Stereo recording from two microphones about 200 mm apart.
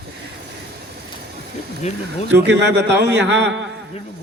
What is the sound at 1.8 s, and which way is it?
Speech, 35° left (ahead or behind).